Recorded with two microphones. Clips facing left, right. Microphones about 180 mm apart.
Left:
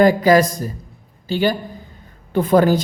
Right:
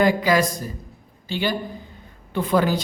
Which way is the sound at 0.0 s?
45° left (ahead or behind).